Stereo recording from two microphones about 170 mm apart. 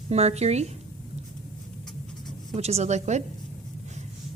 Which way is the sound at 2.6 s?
40° right (ahead or behind).